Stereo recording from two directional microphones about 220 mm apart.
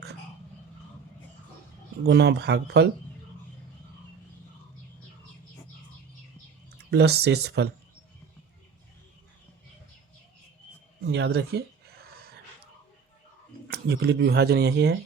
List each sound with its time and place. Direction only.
2.0 s speech: 50° right (ahead or behind)
6.9 s speech: 45° right (ahead or behind)
11.1 s speech: 50° right (ahead or behind)
12.0 s gasp: 45° right (ahead or behind)
13.7 s speech: 50° right (ahead or behind)